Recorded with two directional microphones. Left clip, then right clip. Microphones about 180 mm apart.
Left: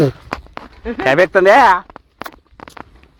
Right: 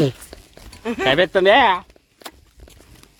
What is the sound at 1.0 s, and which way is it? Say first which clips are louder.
Speech: left 5 dB; 10° left (ahead or behind).